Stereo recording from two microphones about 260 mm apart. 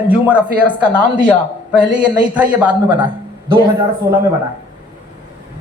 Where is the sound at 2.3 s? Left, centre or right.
Centre.